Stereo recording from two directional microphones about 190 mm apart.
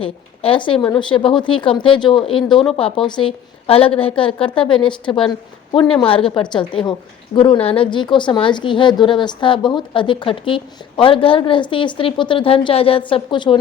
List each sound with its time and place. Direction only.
0.0 s a woman's voice: 30° left (ahead or behind)